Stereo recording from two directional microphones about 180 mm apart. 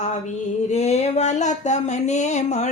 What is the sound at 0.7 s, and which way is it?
Speech, 35° left (ahead or behind).